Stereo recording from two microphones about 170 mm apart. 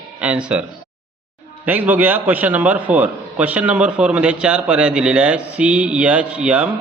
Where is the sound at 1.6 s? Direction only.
10° right (ahead or behind).